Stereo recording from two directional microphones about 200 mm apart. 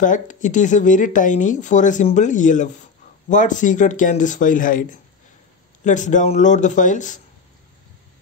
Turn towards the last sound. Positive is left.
turn(degrees=40)  # may be behind; listen again after turning